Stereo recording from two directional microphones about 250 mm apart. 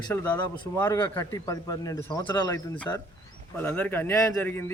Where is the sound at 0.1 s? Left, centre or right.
Centre.